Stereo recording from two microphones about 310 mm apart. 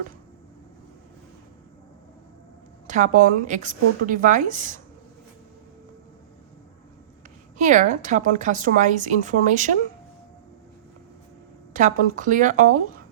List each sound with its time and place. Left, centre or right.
2.8 s a woman's voice: right
7.6 s a woman's voice: right
11.7 s a woman's voice: right